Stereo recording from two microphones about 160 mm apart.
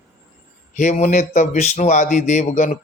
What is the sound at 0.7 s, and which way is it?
Speech, 45° left (ahead or behind).